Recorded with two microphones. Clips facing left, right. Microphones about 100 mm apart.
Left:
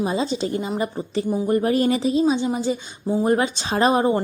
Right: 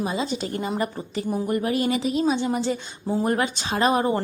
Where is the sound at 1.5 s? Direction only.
35° left (ahead or behind).